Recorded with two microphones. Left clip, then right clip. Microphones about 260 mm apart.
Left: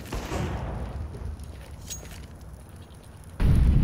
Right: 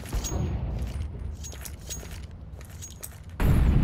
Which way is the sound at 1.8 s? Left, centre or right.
Centre.